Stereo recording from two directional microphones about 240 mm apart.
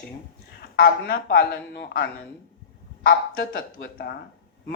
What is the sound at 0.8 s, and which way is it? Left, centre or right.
Speech, left.